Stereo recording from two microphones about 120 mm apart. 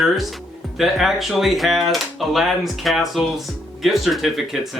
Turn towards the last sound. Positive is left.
turn(degrees=0)  # may be behind; listen again after turning